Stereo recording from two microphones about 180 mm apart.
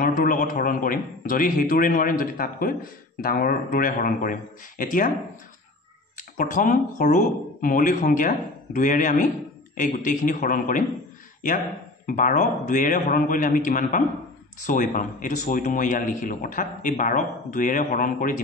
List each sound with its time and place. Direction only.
0.0 s a man's voice: 50° left (ahead or behind)
6.1 s a man's voice: 45° left (ahead or behind)
12.1 s a man's voice: 45° left (ahead or behind)